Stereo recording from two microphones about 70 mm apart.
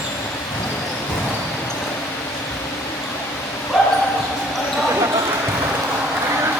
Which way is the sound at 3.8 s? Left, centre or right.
Centre.